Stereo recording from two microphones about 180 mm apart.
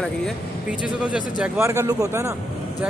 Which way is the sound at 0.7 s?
5° right (ahead or behind).